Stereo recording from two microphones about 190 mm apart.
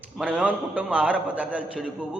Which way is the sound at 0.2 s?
5° right (ahead or behind).